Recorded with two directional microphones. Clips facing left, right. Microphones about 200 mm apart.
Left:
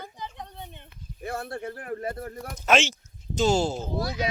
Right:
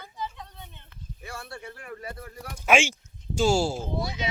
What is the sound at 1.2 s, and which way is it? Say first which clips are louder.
Speech: left 8 dB; 55° left (ahead or behind).